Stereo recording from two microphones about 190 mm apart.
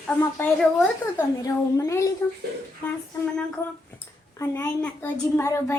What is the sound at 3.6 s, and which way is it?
A woman's voice, 15° left (ahead or behind).